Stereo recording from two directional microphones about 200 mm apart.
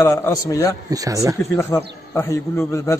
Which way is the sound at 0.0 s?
15° left (ahead or behind).